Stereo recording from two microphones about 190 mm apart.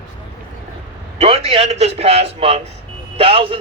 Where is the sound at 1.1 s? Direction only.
30° right (ahead or behind).